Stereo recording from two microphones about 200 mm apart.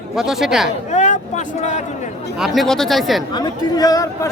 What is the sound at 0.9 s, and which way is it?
Speech, 35° left (ahead or behind).